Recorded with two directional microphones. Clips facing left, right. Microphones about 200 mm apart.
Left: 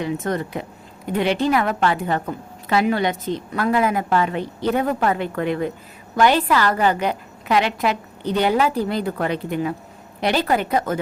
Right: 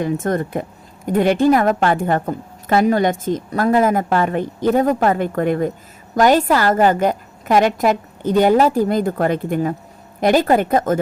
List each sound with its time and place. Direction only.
0.0 s a woman's voice: 50° right (ahead or behind)